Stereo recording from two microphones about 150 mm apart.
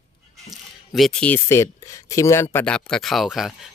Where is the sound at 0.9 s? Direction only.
Centre (ahead or behind).